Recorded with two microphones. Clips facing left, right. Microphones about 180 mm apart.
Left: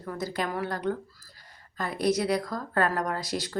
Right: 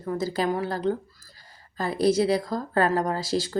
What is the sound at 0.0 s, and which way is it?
A woman's voice, 25° right (ahead or behind).